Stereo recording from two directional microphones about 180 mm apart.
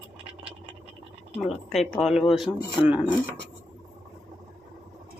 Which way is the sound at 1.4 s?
Centre (ahead or behind).